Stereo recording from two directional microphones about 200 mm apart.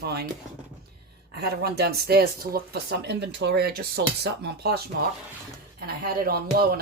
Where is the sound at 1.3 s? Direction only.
50° right (ahead or behind).